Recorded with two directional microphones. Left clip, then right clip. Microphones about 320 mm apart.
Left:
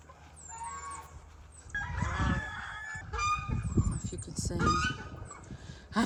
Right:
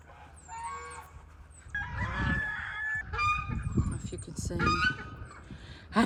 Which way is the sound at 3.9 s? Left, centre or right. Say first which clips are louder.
Left 1 dB; centre.